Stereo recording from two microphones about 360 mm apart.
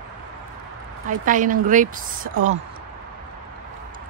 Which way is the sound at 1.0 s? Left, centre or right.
Right.